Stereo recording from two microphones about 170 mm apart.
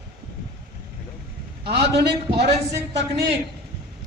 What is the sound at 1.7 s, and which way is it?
Speech, 80° right.